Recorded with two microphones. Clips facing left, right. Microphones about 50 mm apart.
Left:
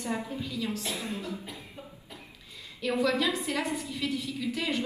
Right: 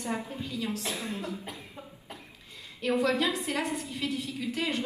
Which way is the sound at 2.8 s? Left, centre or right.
Right.